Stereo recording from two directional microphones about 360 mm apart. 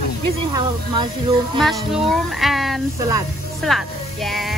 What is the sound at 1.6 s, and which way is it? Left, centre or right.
Speech, centre.